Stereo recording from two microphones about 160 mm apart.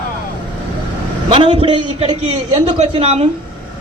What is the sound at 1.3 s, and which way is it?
A man's voice, 35° right (ahead or behind).